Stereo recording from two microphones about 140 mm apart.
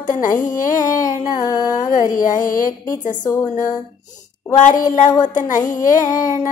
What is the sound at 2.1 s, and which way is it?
Music, 75° left (ahead or behind).